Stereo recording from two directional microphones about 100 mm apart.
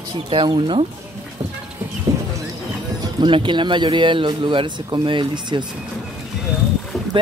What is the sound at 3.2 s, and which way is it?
Speech, 55° right (ahead or behind).